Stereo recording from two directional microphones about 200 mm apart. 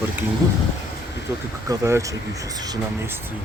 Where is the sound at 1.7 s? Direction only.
15° right (ahead or behind).